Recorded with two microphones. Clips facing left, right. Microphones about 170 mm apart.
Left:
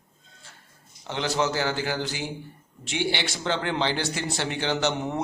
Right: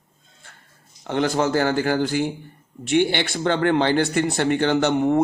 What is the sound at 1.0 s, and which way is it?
Speech, 50° right (ahead or behind).